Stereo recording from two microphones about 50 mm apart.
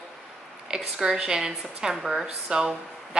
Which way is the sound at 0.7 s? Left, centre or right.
Centre.